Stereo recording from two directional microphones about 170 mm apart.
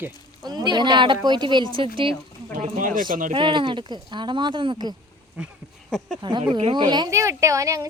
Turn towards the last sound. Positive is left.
turn(degrees=-20)  # may be behind; listen again after turning